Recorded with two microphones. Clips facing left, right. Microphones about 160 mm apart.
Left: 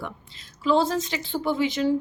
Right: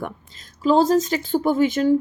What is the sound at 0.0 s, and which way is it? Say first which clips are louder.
Speech: right 5 dB; 45° right (ahead or behind).